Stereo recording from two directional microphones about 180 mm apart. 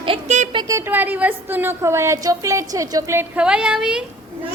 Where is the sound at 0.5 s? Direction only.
20° right (ahead or behind); by 4.0 s 5° right (ahead or behind).